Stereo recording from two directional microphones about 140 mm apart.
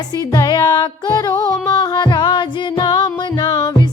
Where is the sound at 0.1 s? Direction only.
30° left (ahead or behind).